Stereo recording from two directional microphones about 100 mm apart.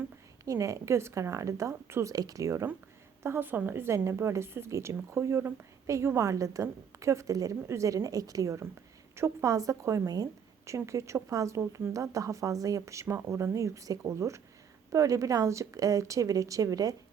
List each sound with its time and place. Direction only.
0.4 s speech: 35° right (ahead or behind)
3.2 s a woman's voice: 20° right (ahead or behind)